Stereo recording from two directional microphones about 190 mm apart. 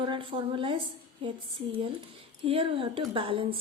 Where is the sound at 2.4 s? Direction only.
30° right (ahead or behind).